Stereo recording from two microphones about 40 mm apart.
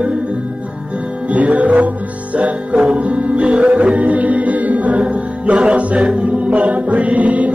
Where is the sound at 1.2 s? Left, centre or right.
Right.